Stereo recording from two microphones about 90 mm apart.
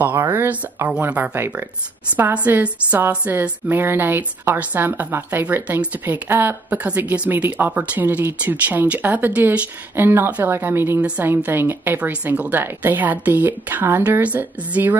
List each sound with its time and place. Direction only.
0.0 s a woman's voice: 25° right (ahead or behind)